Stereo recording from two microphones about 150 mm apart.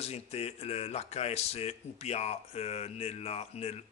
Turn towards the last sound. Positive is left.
turn(degrees=45)  # may be behind; listen again after turning